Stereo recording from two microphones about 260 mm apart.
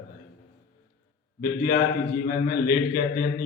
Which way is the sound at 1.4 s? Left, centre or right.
Left.